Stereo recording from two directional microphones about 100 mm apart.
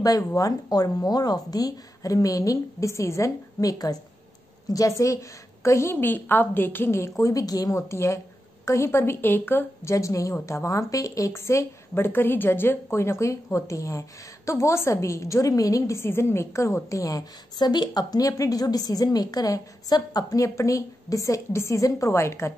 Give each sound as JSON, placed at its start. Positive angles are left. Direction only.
{"t": 0.0, "sound": "a woman's voice", "side_deg": 35}
{"t": 9.9, "sound": "a woman's voice", "side_deg": 35}